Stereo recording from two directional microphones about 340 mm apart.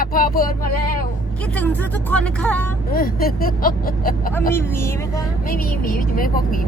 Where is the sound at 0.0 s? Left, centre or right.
Left.